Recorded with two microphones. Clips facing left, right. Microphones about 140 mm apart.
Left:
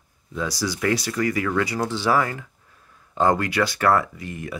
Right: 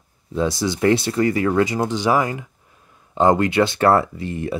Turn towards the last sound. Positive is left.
turn(degrees=-30)  # may be behind; listen again after turning